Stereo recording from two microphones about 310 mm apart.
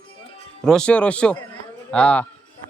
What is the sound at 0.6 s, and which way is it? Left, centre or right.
Speech, centre.